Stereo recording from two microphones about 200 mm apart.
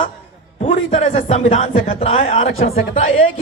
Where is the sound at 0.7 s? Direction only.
35° left (ahead or behind).